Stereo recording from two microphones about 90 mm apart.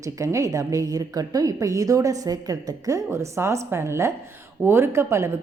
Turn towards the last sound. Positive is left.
turn(degrees=-30)  # may be behind; listen again after turning